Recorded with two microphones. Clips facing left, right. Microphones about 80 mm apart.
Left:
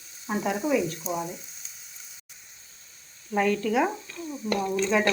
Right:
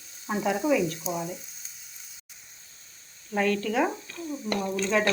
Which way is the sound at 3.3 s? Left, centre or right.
Centre.